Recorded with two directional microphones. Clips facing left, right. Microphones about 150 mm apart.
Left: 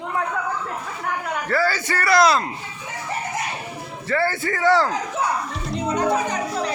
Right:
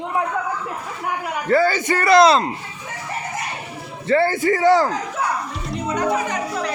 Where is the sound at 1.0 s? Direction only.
20° right (ahead or behind).